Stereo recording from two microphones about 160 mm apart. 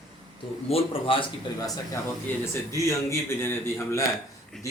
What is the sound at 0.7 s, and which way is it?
Speech, 35° left (ahead or behind).